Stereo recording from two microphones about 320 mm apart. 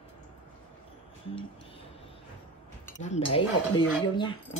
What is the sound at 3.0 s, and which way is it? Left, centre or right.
Speech, centre.